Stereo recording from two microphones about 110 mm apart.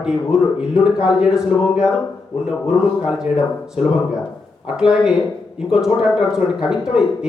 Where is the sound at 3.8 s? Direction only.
90° left.